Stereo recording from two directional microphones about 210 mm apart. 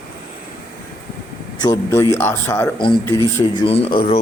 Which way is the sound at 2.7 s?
25° left (ahead or behind).